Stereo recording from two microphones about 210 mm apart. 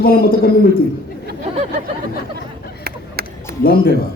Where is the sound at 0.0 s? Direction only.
45° left (ahead or behind).